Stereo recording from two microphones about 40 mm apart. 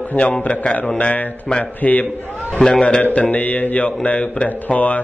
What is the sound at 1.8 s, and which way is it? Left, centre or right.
Speech, left.